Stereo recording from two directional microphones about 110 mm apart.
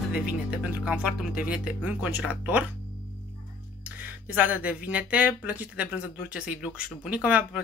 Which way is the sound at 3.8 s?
15° right (ahead or behind).